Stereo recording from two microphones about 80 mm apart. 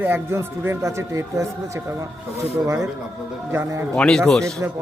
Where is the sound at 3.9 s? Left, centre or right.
Centre.